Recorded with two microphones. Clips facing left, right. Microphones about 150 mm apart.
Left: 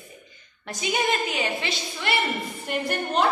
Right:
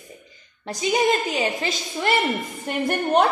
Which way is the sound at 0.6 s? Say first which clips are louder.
Right 5 dB; 30° right (ahead or behind).